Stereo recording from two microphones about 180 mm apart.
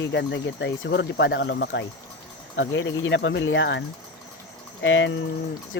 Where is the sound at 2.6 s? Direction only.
90° left.